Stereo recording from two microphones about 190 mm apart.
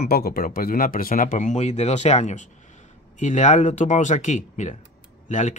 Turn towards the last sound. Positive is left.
turn(degrees=40)  # may be behind; listen again after turning